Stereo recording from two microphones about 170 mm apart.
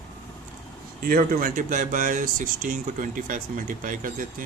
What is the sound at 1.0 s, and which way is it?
Speech, 60° right (ahead or behind).